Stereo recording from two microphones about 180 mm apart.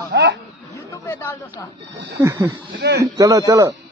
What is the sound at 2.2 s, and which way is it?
Speech, 20° right (ahead or behind).